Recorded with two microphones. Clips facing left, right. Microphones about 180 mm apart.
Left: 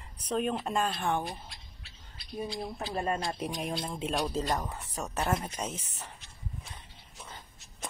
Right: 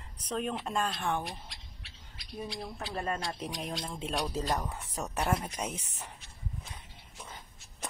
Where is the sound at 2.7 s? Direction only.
20° left (ahead or behind).